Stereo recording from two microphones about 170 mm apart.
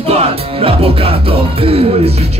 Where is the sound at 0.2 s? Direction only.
35° right (ahead or behind).